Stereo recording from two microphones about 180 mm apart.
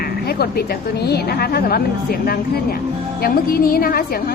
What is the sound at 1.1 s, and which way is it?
Speech, 60° left (ahead or behind).